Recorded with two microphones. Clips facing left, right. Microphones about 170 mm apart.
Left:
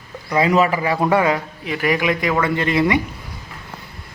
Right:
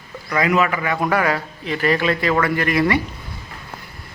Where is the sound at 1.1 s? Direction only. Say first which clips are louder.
Left 3 dB; 20° left (ahead or behind).